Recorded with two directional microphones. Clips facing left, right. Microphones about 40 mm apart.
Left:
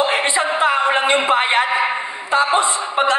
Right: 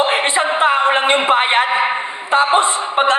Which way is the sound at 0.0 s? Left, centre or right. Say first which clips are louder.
Right 2 dB; right.